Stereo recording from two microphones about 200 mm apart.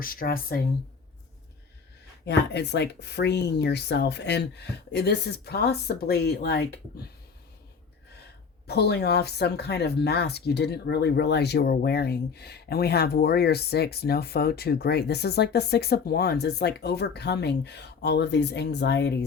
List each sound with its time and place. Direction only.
0.0 s speech: 45° left (ahead or behind)
2.2 s speech: 60° left (ahead or behind)
8.6 s speech: 55° left (ahead or behind)